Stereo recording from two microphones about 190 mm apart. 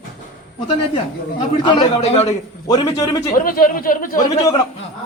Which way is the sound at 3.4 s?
45° left (ahead or behind).